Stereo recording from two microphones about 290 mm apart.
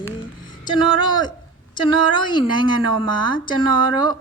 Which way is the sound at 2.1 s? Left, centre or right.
Centre.